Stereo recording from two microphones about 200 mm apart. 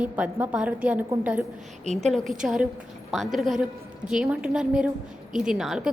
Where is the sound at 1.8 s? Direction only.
35° right (ahead or behind).